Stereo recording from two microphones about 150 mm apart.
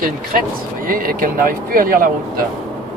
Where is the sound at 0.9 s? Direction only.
70° right (ahead or behind).